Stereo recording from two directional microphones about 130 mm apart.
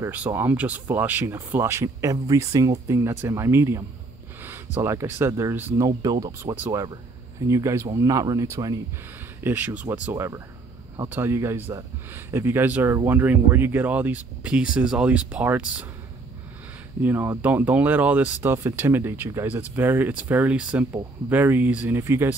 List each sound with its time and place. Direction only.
0.3 s speech: 15° right (ahead or behind)
9.4 s speech: 15° right (ahead or behind)
17.0 s speech: 15° right (ahead or behind)